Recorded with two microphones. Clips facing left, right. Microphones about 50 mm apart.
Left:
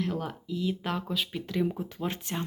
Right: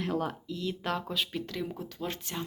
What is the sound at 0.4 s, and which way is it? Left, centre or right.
Speech, centre.